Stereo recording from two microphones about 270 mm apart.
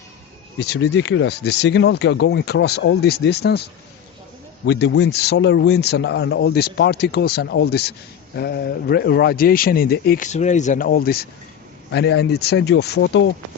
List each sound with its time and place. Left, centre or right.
0.6 s speech: left